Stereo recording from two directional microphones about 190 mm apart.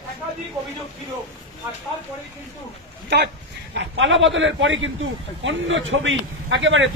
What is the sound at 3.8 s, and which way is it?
A man's voice, 80° right.